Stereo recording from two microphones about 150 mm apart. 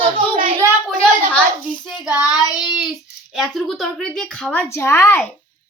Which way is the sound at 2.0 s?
10° right (ahead or behind).